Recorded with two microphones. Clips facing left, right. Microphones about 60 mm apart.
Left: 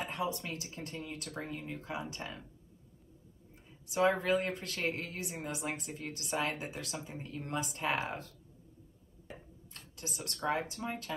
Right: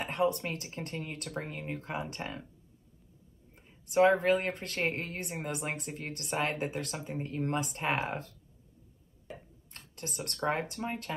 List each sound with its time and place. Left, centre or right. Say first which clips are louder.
0.0 s a woman's voice: right 6 dB; right
3.9 s a woman's voice: right 5 dB; right
9.8 s a woman's voice: right 4 dB; right